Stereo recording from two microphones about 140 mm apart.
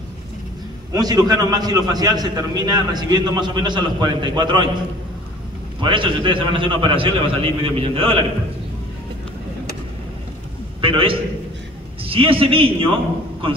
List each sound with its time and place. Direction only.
0.9 s a man's voice: 30° right (ahead or behind)
5.8 s a man's voice: 35° right (ahead or behind)
10.8 s a man's voice: 40° right (ahead or behind)